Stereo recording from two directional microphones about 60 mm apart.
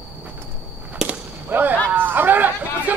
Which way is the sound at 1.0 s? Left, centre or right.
Right.